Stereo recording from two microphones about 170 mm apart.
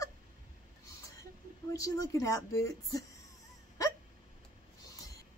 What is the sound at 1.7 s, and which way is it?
Speech, 20° left (ahead or behind).